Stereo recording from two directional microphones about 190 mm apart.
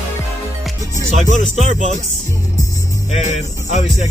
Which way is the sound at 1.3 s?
40° left (ahead or behind).